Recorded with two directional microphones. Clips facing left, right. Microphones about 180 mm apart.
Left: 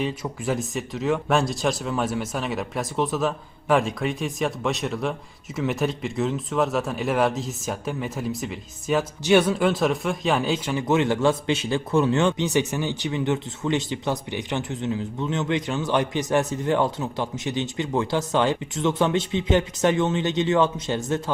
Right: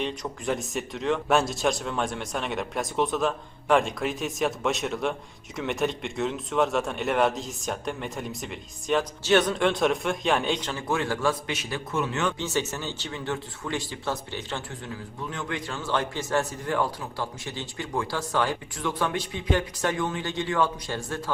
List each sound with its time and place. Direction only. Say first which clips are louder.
0.0 s speech: left 3 dB; 5° left (ahead or behind); by 12.3 s 30° left (ahead or behind)
12.4 s speech: left 6 dB; 15° left (ahead or behind)